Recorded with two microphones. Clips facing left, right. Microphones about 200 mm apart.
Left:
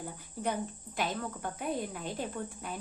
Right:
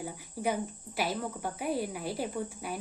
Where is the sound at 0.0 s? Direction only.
10° right (ahead or behind).